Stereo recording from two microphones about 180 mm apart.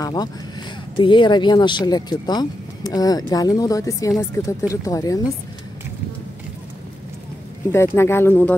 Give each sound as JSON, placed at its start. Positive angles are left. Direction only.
{"t": 0.0, "sound": "speech", "side_deg": 20}
{"t": 7.7, "sound": "speech", "side_deg": 15}